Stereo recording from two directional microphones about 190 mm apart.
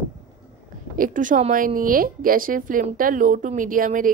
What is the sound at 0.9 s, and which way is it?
Speech, 45° right (ahead or behind).